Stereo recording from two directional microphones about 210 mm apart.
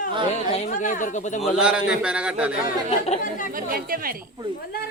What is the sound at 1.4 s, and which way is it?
A man's voice, 5° right (ahead or behind).